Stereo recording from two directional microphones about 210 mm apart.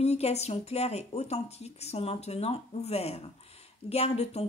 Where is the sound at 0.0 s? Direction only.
30° left (ahead or behind).